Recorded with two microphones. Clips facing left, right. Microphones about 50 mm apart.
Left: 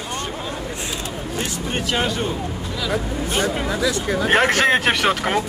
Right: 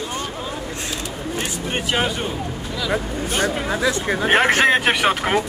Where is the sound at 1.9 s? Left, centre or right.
Centre.